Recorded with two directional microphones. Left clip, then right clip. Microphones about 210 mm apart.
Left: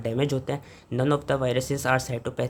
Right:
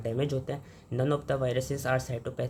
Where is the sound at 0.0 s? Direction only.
20° left (ahead or behind).